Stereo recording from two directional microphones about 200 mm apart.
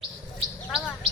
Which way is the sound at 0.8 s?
5° left (ahead or behind).